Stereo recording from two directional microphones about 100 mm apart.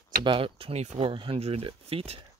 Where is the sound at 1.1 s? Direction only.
65° right (ahead or behind).